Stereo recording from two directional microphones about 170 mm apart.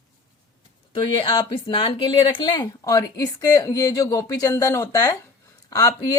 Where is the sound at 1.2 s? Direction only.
30° left (ahead or behind).